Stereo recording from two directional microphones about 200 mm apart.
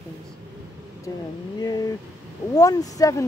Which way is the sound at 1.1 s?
15° left (ahead or behind).